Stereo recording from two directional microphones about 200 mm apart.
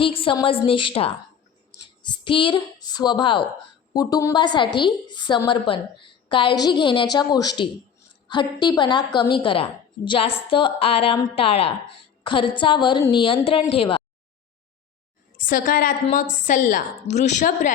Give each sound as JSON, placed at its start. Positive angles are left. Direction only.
{"t": 0.0, "sound": "a woman's voice", "side_deg": 25}
{"t": 15.4, "sound": "a woman's voice", "side_deg": 45}